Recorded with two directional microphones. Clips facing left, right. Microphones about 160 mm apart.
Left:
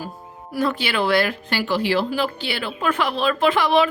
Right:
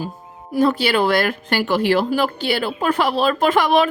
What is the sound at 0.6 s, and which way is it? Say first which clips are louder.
Speech: right 5 dB; 40° right (ahead or behind).